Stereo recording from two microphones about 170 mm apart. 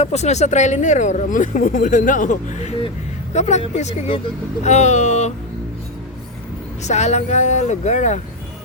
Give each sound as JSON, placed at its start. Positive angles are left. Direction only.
{"t": 0.0, "sound": "speech", "side_deg": 40}
{"t": 6.8, "sound": "speech", "side_deg": 40}